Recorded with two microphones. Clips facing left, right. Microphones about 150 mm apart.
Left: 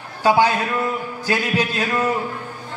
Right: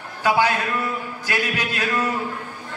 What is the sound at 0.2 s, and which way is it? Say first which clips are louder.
A man's voice: left 3 dB; 30° left (ahead or behind).